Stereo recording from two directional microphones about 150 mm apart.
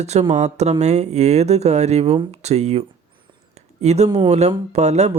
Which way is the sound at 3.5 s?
45° right (ahead or behind).